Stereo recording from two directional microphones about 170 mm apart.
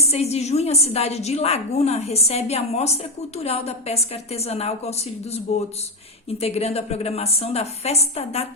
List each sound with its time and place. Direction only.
0.0 s a woman's voice: 40° left (ahead or behind)